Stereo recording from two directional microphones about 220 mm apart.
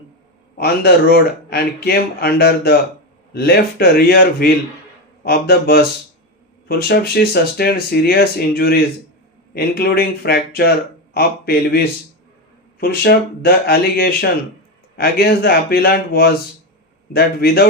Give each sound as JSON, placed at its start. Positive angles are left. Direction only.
{"t": 0.5, "sound": "speech", "side_deg": 45}
{"t": 12.8, "sound": "speech", "side_deg": 45}